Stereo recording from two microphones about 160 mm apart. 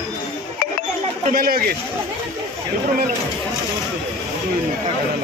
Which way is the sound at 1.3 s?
65° right (ahead or behind).